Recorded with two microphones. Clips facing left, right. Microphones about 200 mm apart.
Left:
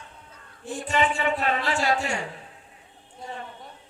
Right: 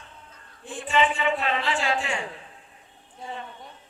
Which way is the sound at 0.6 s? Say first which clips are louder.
Right 1 dB; 40° left (ahead or behind).